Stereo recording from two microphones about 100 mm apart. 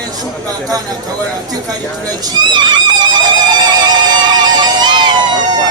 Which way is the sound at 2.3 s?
50° right (ahead or behind).